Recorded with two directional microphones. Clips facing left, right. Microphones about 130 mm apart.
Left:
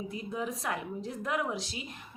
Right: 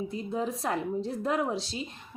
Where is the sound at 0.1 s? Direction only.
30° right (ahead or behind).